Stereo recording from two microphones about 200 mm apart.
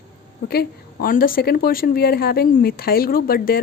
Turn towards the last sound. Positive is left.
turn(degrees=50)  # may be behind; listen again after turning